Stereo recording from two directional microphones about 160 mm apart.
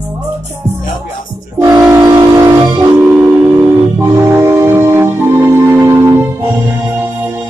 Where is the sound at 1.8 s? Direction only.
20° right (ahead or behind).